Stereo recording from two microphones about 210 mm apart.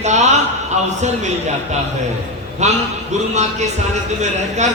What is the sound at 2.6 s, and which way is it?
Speech, 35° right (ahead or behind).